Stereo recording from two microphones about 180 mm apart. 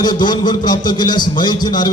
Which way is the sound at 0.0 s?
25° left (ahead or behind).